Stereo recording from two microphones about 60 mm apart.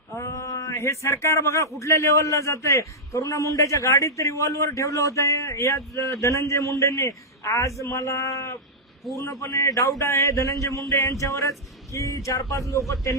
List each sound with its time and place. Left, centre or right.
0.1 s a man's voice: left